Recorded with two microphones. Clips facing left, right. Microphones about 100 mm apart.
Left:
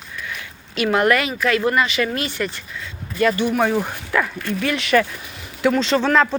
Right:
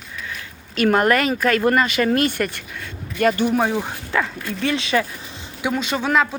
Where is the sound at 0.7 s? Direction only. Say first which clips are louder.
Right 1 dB; 40° right (ahead or behind).